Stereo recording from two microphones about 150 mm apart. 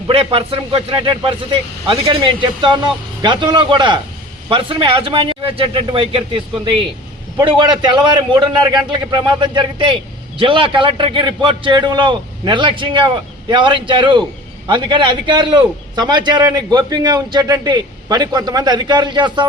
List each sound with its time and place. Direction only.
0.1 s a man's voice: 40° right (ahead or behind)